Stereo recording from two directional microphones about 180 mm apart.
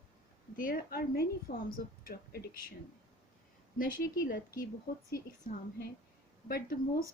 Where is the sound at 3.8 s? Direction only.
50° left (ahead or behind).